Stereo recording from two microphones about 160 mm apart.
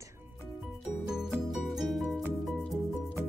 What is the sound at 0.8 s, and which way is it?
Music, 5° right (ahead or behind).